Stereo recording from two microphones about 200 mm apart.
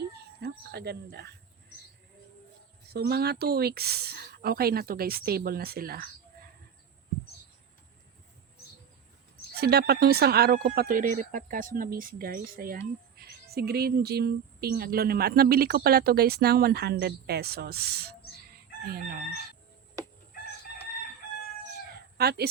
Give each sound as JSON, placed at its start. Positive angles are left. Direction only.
{"t": 0.0, "sound": "a sound", "side_deg": -55}
{"t": 2.9, "sound": "speech", "side_deg": -55}
{"t": 9.6, "sound": "speech", "side_deg": -50}
{"t": 22.2, "sound": "speech", "side_deg": -50}